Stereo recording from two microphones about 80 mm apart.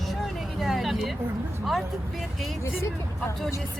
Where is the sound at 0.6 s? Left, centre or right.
Centre.